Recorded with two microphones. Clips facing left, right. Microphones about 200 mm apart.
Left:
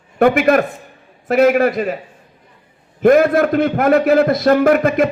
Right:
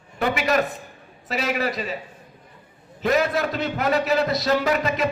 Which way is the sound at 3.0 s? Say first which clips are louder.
Left 10 dB; 55° left (ahead or behind).